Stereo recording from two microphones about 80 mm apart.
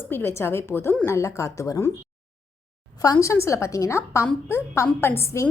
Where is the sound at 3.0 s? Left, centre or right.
Left.